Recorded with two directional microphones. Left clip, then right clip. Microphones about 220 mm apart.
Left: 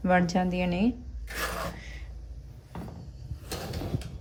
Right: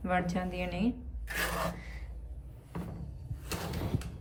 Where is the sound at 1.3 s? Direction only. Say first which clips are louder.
Even; centre (ahead or behind).